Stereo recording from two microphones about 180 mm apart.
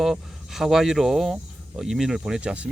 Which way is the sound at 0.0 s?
Centre (ahead or behind).